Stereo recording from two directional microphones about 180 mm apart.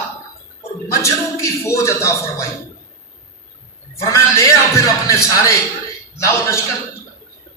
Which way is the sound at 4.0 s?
15° left (ahead or behind).